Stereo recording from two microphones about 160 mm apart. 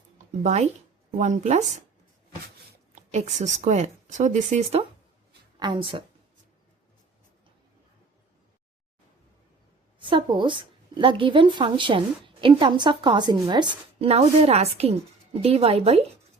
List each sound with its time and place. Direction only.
0.4 s a woman's voice: 45° right (ahead or behind)
2.9 s a woman's voice: 45° right (ahead or behind)
5.5 s a woman's voice: 30° right (ahead or behind)
10.0 s a woman's voice: 30° right (ahead or behind)
14.1 s a woman's voice: 40° right (ahead or behind)